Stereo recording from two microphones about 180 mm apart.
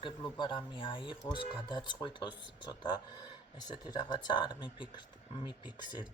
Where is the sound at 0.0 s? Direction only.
25° left (ahead or behind).